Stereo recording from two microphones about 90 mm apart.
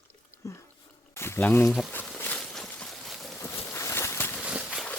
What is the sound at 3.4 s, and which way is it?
Boat, 30° left (ahead or behind).